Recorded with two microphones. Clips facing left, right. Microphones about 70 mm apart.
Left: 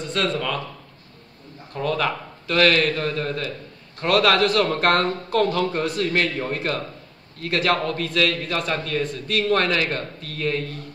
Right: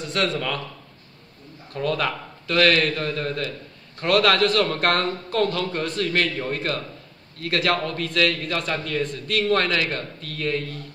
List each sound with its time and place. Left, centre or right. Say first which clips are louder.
0.0 s speech: left 1 dB; centre
1.7 s a man's voice: left 1 dB; centre